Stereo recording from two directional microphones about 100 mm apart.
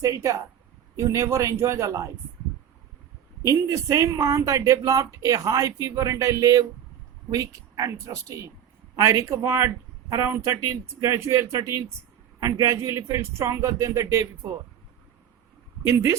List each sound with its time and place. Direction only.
0.0 s speech: 35° right (ahead or behind)
3.4 s speech: 30° right (ahead or behind)